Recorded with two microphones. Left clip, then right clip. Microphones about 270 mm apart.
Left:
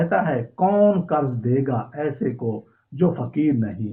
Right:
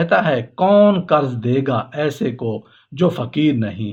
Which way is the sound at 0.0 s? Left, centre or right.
Right.